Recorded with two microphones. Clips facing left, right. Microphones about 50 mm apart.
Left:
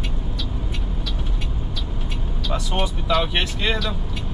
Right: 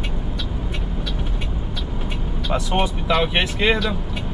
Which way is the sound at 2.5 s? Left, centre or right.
Centre.